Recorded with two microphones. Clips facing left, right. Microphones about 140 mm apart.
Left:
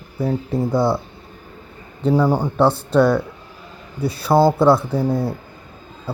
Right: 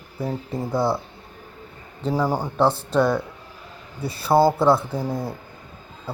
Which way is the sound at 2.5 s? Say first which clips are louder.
Left 3 dB; centre (ahead or behind).